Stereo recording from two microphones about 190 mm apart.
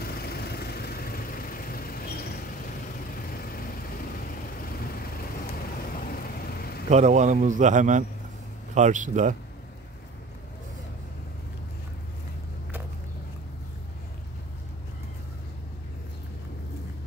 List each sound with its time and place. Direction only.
0.0 s vehicle: 55° left (ahead or behind)
6.0 s vehicle: 50° left (ahead or behind)
6.9 s a man's voice: 40° right (ahead or behind)